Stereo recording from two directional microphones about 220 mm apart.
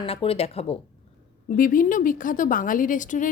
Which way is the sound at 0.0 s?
25° left (ahead or behind).